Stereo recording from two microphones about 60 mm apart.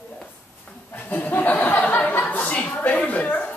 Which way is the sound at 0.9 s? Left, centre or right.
Left.